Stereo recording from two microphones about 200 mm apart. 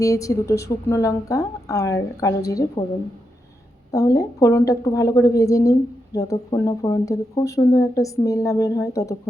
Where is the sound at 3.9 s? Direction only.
15° left (ahead or behind).